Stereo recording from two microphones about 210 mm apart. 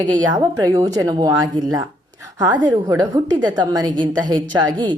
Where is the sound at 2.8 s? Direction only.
20° right (ahead or behind).